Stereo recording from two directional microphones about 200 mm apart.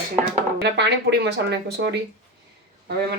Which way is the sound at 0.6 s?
60° right (ahead or behind).